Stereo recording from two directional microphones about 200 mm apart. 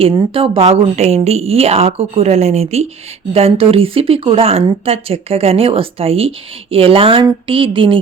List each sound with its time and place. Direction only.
0.2 s speech: 25° right (ahead or behind)